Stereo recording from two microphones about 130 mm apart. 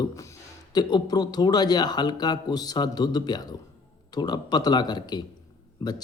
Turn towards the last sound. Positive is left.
turn(degrees=30)  # may be behind; listen again after turning